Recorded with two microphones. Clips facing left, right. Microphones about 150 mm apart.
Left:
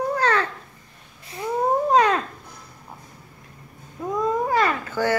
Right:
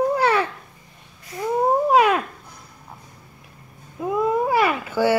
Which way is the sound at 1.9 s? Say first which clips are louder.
Right 1 dB; 10° right (ahead or behind).